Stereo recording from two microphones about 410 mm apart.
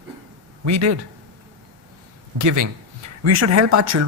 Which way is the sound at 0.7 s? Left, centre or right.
Right.